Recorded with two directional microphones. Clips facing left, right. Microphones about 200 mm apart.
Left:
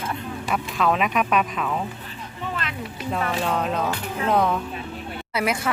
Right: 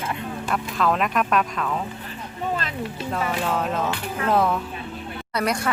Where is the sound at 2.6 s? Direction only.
35° right (ahead or behind).